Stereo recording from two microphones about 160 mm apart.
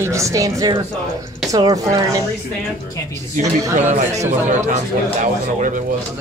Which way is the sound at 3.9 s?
50° right (ahead or behind).